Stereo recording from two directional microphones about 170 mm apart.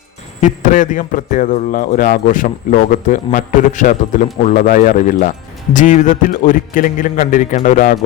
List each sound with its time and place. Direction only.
0.4 s a man's voice: 50° left (ahead or behind)